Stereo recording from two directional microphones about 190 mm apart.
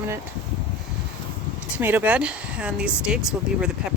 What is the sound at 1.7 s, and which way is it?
Speech, 10° right (ahead or behind).